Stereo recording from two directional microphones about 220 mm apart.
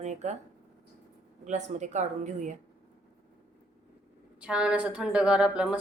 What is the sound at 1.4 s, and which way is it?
Speech, 30° right (ahead or behind).